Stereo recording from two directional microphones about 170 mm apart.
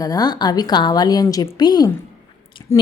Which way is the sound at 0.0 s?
20° left (ahead or behind).